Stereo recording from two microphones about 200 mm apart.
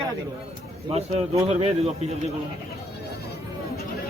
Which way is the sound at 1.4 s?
30° right (ahead or behind).